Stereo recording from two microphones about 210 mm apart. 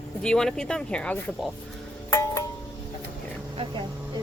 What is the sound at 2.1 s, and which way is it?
Music, 15° left (ahead or behind).